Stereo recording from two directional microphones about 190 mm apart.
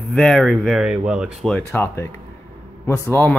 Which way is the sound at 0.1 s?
Centre (ahead or behind).